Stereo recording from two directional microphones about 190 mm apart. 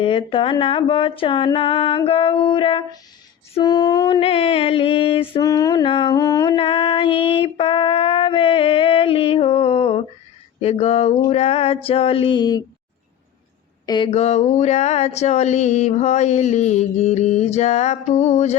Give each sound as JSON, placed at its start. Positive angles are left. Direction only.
{"t": 0.0, "sound": "speech", "side_deg": 30}
{"t": 4.2, "sound": "speech", "side_deg": 30}
{"t": 6.1, "sound": "music", "side_deg": 15}
{"t": 6.6, "sound": "female singing", "side_deg": 30}
{"t": 10.6, "sound": "speech", "side_deg": 35}
{"t": 13.8, "sound": "speech", "side_deg": 25}